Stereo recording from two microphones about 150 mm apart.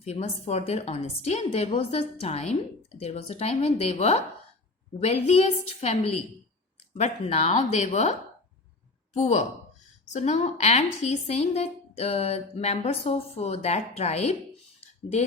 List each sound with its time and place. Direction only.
0.0 s a woman's voice: 45° left (ahead or behind)
9.1 s a woman's voice: 50° left (ahead or behind)